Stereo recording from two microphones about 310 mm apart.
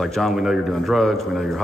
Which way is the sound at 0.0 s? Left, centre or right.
Centre.